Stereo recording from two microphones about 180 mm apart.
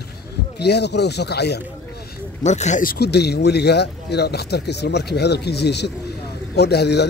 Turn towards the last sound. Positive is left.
turn(degrees=65)  # may be behind; listen again after turning